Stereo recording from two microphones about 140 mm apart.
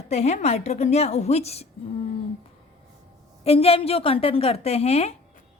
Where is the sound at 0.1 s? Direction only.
50° left (ahead or behind).